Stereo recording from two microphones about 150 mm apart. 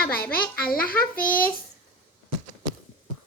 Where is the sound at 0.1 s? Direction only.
85° left.